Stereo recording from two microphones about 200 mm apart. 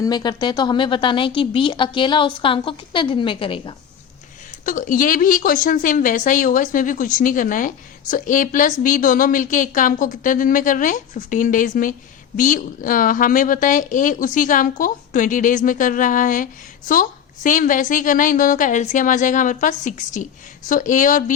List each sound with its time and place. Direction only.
0.0 s a woman's voice: 20° left (ahead or behind)
4.6 s a woman's voice: 45° left (ahead or behind)